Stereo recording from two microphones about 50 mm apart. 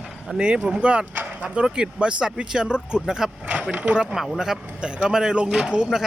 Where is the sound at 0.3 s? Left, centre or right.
Centre.